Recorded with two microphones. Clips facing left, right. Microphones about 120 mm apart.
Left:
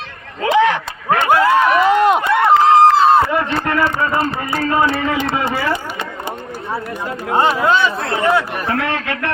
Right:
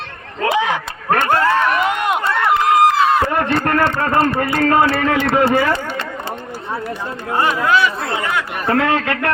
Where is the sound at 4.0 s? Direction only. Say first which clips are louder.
Right 2 dB; 55° right (ahead or behind).